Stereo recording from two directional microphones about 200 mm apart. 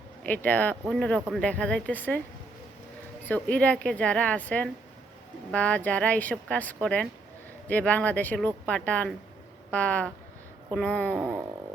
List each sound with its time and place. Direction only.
0.2 s speech: 10° left (ahead or behind)
3.2 s speech: 10° left (ahead or behind)
11.2 s speech: 5° right (ahead or behind)